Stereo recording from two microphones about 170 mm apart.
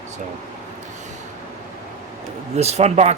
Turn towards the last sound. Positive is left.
turn(degrees=-40)  # may be behind; listen again after turning